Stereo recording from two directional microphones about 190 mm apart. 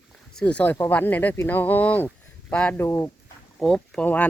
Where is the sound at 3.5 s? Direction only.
Centre (ahead or behind).